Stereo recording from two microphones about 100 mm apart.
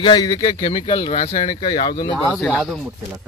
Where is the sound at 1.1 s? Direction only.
90° left.